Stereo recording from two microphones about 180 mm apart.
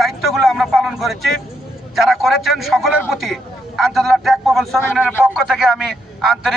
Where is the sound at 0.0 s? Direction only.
Centre (ahead or behind).